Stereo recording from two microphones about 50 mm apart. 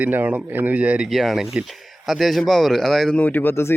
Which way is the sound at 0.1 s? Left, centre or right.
Right.